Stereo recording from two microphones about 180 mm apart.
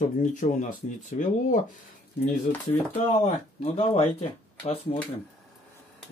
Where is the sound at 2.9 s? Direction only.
35° left (ahead or behind).